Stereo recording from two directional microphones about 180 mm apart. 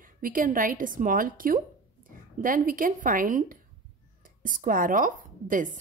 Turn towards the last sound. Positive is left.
turn(degrees=-45)  # may be behind; listen again after turning